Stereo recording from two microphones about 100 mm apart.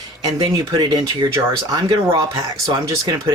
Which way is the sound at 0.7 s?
35° right (ahead or behind).